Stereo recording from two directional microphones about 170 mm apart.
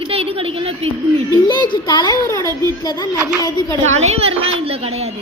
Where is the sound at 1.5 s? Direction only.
25° left (ahead or behind).